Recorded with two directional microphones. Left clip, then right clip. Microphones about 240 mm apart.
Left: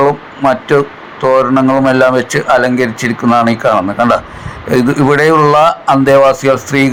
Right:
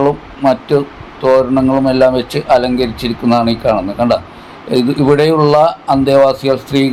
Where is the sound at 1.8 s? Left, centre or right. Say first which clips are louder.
Left 2 dB; centre.